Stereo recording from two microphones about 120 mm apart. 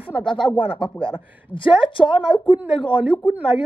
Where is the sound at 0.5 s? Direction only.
50° left (ahead or behind).